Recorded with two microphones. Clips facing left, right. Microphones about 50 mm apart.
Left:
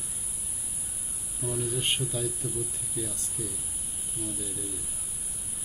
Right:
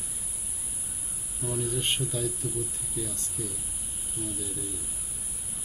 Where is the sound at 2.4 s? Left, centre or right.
Centre.